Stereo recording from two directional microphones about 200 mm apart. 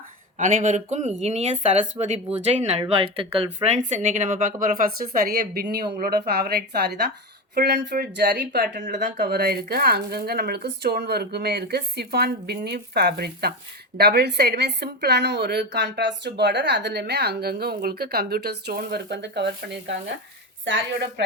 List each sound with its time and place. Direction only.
0.3 s speech: 40° right (ahead or behind); by 19.5 s 60° right (ahead or behind)
20.7 s speech: 60° right (ahead or behind)